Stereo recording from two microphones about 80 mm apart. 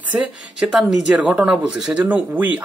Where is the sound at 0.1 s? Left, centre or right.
Centre.